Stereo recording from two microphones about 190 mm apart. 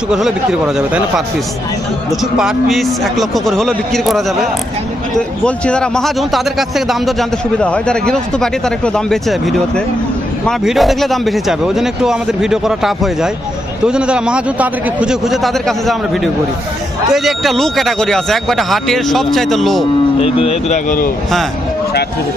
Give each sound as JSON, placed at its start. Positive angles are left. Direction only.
{"t": 0.1, "sound": "a man's voice", "side_deg": -5}
{"t": 20.2, "sound": "speech", "side_deg": 30}